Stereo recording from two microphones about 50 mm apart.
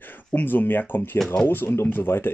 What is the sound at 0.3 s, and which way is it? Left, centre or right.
Speech, left.